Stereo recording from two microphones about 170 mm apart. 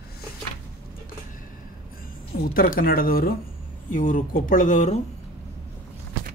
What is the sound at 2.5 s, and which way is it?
Speech, 60° left (ahead or behind).